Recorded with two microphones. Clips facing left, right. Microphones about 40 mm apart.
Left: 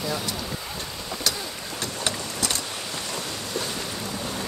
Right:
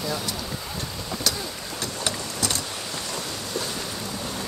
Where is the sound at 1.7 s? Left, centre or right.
Left.